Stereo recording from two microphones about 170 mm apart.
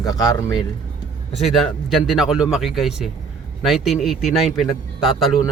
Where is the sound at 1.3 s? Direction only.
40° left (ahead or behind).